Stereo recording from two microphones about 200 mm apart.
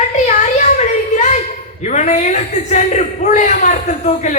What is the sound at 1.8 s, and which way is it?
A man's voice, 35° left (ahead or behind).